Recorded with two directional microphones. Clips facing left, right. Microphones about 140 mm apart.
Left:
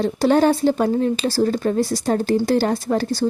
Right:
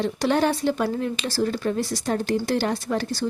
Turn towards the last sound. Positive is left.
turn(degrees=40)  # may be behind; listen again after turning